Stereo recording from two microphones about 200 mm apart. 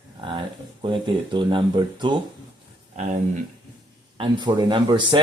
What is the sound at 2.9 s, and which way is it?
Speech, 35° right (ahead or behind).